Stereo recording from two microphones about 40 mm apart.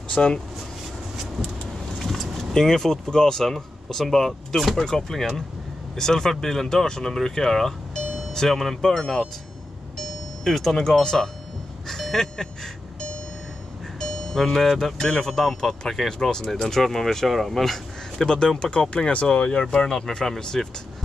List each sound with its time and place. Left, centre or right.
0.1 s speech: left
2.0 s speech: centre
9.9 s music: centre
10.8 s speech: centre
13.9 s speech: centre
16.6 s speech: centre
18.1 s speech: centre